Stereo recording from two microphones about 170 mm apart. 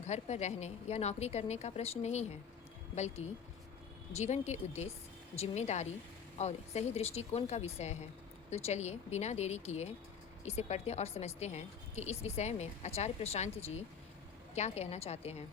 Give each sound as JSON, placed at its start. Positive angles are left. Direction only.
{"t": 0.0, "sound": "speech", "side_deg": 40}